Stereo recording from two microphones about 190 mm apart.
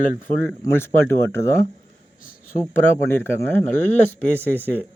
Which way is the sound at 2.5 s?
10° left (ahead or behind).